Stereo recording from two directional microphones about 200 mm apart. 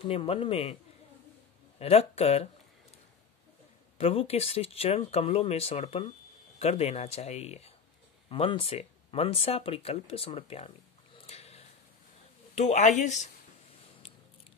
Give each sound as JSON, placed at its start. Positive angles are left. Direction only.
{"t": 0.1, "sound": "speech", "side_deg": 30}
{"t": 1.8, "sound": "speech", "side_deg": 30}
{"t": 4.0, "sound": "speech", "side_deg": 30}
{"t": 11.1, "sound": "a sound", "side_deg": 30}
{"t": 12.5, "sound": "speech", "side_deg": 35}